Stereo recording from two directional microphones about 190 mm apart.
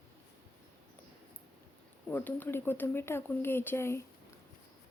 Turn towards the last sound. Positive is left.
turn(degrees=15)  # may be behind; listen again after turning